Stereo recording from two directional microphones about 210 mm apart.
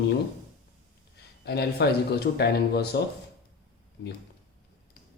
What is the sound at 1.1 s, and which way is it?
A man's voice, 50° left (ahead or behind).